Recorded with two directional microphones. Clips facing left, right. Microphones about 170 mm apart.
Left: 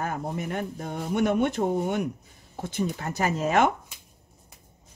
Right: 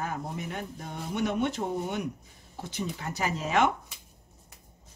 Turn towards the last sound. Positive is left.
turn(degrees=50)  # may be behind; listen again after turning